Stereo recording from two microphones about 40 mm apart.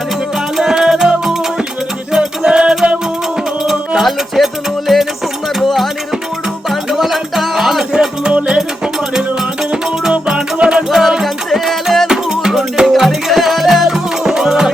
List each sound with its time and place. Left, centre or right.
0.5 s music: centre
4.4 s music: centre
4.9 s music: centre
8.3 s music: right
10.1 s music: right
10.9 s music: centre
12.0 s music: centre